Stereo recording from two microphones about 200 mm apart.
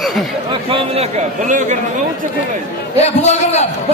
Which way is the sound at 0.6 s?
30° right (ahead or behind).